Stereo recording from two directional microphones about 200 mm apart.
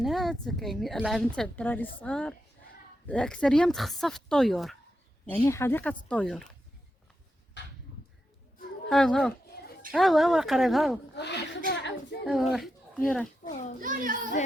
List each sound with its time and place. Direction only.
0.0 s a woman's voice: centre (ahead or behind)
5.5 s speech: 15° left (ahead or behind)
7.6 s a sound: 60° left (ahead or behind)
8.9 s a woman's voice: 5° left (ahead or behind)
9.5 s a sound: 60° left (ahead or behind)
9.9 s a woman's voice: centre (ahead or behind)
11.1 s a woman's voice: 60° left (ahead or behind)
12.2 s a woman's voice: centre (ahead or behind)
13.4 s a child's voice: 40° left (ahead or behind)
13.7 s a child's voice: 40° right (ahead or behind)